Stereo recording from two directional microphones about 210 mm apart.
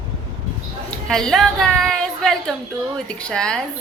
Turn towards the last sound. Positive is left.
turn(degrees=5)  # may be behind; listen again after turning